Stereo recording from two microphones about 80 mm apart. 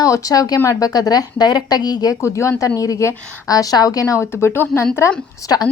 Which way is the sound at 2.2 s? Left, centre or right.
Left.